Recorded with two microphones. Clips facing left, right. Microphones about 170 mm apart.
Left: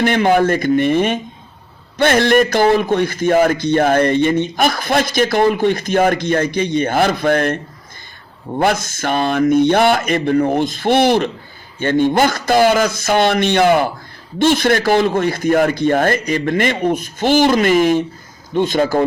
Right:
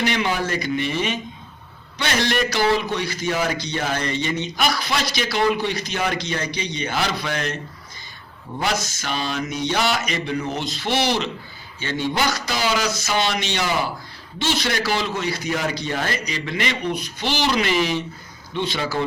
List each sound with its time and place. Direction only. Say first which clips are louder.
0.0 s a man's voice: left 9 dB; 50° left (ahead or behind)